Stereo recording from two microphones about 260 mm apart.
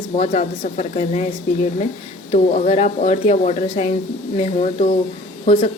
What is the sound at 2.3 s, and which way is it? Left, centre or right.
A woman's voice, left.